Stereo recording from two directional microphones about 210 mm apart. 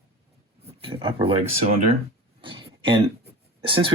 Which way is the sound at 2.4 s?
25° right (ahead or behind).